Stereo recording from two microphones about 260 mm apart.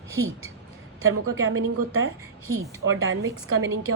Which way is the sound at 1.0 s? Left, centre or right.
Right.